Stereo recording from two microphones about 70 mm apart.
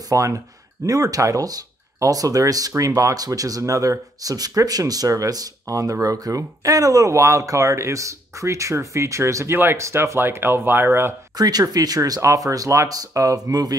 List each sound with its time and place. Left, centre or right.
0.1 s speech: right
11.3 s speech: right